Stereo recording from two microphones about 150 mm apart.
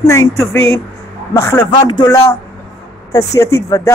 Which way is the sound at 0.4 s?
20° left (ahead or behind).